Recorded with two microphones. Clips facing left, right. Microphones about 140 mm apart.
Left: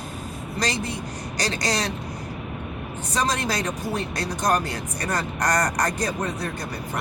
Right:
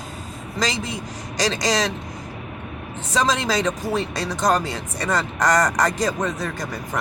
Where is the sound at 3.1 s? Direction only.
90° right.